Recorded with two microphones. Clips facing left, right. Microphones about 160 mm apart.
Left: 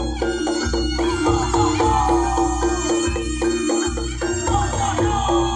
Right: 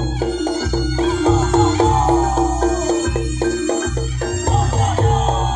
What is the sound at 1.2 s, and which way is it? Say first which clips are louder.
Music: right 4 dB; 25° right (ahead or behind).